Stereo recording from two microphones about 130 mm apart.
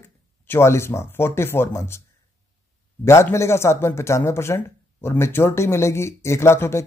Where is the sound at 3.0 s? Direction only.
20° left (ahead or behind).